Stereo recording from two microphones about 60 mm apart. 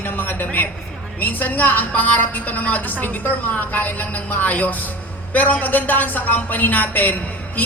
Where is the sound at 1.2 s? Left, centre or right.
Left.